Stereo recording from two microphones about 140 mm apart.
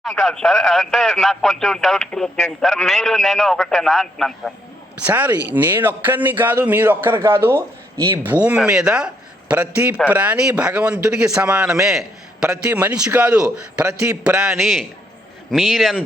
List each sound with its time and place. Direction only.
0.0 s speech: centre (ahead or behind)
5.0 s a man's voice: 10° right (ahead or behind)